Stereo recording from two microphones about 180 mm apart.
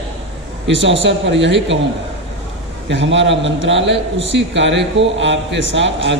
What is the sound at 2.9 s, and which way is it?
A man's voice, 90° right.